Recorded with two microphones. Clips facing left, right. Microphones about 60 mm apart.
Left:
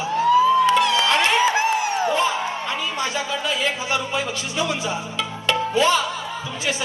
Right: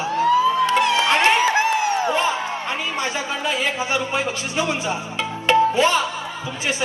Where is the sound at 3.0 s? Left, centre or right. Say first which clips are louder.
Even; right.